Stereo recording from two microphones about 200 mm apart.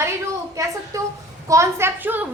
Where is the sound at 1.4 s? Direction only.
15° right (ahead or behind).